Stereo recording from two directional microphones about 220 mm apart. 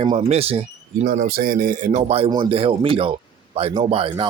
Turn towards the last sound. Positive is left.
turn(degrees=-25)  # may be behind; listen again after turning